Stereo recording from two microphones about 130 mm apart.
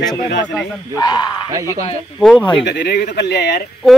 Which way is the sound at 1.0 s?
35° left (ahead or behind).